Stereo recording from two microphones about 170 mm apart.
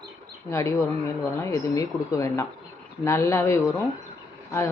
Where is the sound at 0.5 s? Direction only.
20° left (ahead or behind).